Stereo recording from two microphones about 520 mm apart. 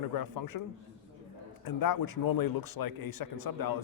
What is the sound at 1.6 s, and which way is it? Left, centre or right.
Speech, left.